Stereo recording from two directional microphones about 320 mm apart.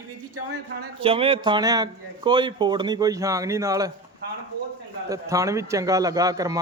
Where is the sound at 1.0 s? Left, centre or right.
Centre.